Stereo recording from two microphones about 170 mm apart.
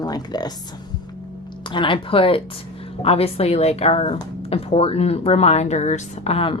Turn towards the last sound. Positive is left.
turn(degrees=35)  # may be behind; listen again after turning